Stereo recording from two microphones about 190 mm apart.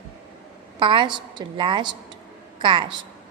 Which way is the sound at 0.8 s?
25° right (ahead or behind).